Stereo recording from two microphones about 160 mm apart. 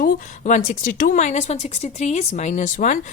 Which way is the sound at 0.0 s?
55° left (ahead or behind).